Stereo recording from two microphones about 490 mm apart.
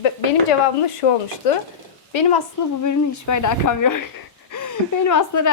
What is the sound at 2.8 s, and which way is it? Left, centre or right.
A woman's voice, left.